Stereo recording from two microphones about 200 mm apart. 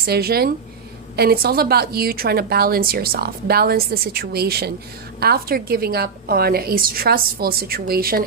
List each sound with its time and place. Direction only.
0.0 s a woman's voice: 50° right (ahead or behind)